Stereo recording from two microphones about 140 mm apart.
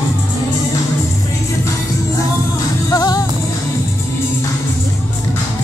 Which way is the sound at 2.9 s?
25° left (ahead or behind).